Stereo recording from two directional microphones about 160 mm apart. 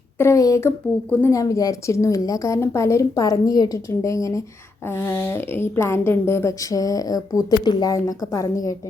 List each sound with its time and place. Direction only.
0.2 s a woman's voice: 20° left (ahead or behind)